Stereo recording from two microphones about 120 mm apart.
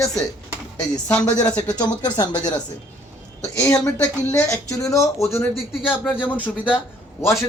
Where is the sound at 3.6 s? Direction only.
10° left (ahead or behind).